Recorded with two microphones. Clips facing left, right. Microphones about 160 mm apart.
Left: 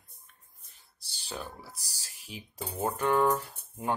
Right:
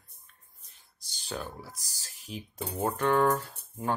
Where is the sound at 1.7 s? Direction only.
35° left (ahead or behind).